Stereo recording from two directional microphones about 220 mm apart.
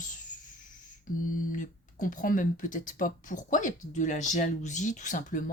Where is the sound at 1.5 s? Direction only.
35° left (ahead or behind).